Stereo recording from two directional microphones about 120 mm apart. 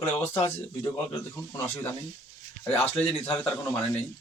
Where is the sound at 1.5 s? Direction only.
20° left (ahead or behind).